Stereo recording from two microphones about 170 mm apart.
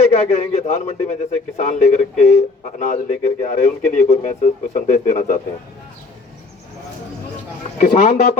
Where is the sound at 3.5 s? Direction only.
40° left (ahead or behind).